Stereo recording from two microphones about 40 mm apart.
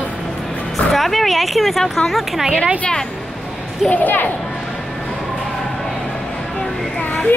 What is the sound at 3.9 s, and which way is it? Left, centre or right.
Speech, left.